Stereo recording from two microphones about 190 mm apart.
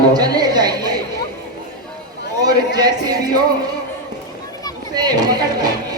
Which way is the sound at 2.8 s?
20° right (ahead or behind).